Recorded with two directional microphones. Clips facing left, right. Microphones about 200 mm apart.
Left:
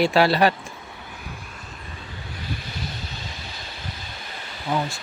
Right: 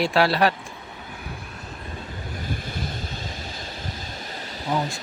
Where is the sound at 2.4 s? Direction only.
50° right (ahead or behind).